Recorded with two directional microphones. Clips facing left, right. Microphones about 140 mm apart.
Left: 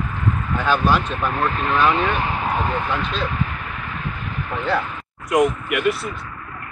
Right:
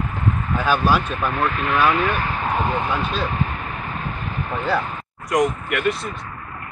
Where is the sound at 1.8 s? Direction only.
20° left (ahead or behind).